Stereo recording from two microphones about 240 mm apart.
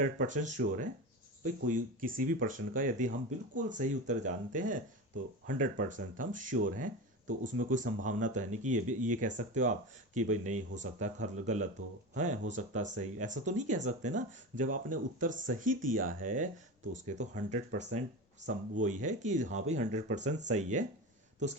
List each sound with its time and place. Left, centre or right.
0.0 s speech: right
5.9 s speech: right